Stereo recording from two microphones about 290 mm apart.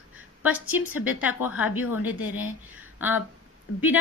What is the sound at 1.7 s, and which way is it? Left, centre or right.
Speech, left.